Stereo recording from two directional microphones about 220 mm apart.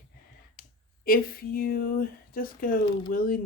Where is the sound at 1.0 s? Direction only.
40° left (ahead or behind).